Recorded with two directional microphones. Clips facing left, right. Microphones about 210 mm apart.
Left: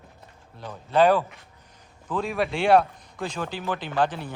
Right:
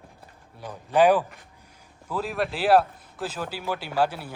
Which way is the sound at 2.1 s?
5° right (ahead or behind).